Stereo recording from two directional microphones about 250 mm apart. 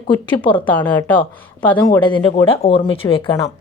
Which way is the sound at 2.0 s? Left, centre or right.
Left.